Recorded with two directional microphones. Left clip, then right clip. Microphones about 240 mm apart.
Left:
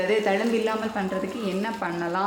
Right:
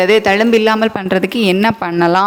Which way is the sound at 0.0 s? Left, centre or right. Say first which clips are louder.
Right 12 dB; right.